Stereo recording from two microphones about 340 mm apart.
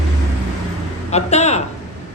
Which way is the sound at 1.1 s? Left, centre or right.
Centre.